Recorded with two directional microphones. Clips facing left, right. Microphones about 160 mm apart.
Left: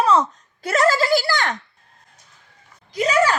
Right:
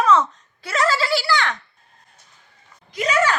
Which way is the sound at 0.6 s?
45° left (ahead or behind).